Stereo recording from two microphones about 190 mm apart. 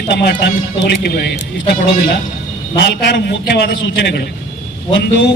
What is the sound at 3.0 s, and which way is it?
Speech, 60° left (ahead or behind).